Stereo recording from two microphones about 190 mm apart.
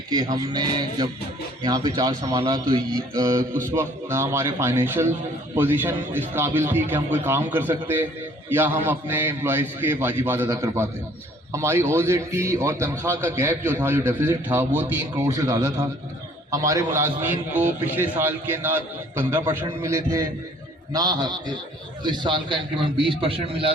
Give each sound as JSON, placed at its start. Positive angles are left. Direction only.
{"t": 0.1, "sound": "a man's voice", "side_deg": -20}